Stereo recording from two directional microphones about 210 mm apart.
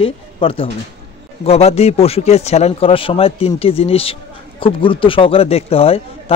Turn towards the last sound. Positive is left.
turn(degrees=25)  # may be behind; listen again after turning